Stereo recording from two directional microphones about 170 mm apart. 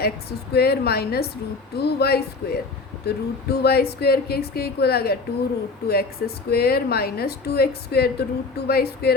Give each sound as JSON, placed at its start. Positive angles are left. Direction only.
{"t": 0.0, "sound": "a woman's voice", "side_deg": 70}